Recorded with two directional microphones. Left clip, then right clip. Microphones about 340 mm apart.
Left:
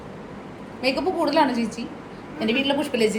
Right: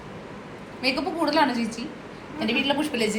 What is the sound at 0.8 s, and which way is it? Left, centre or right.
A woman's voice, centre.